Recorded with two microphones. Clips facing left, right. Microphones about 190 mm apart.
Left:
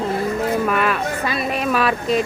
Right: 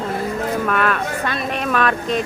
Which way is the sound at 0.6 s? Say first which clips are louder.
Even; 5° left (ahead or behind).